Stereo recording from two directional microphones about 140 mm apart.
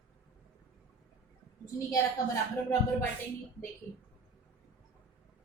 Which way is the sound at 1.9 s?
20° left (ahead or behind).